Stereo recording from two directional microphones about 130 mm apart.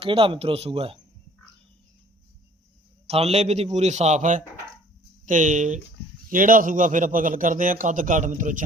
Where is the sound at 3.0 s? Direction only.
55° right (ahead or behind); by 5.8 s 75° right (ahead or behind).